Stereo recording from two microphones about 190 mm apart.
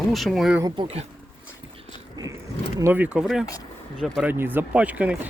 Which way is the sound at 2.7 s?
10° right (ahead or behind).